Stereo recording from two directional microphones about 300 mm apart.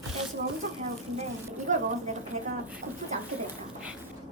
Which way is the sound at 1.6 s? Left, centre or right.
Right.